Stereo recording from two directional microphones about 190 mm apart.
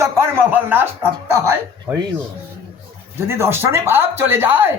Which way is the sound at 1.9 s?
10° right (ahead or behind).